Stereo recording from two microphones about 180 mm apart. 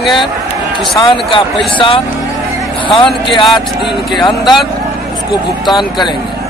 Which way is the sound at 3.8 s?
Centre (ahead or behind).